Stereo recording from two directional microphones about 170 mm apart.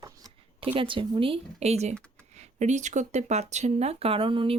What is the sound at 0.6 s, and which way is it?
Speech, 30° right (ahead or behind).